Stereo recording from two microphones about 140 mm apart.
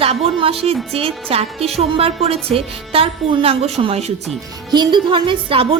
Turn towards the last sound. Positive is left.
turn(degrees=-40)  # may be behind; listen again after turning